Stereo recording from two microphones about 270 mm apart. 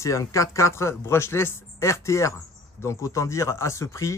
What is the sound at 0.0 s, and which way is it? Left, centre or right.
Speech, centre.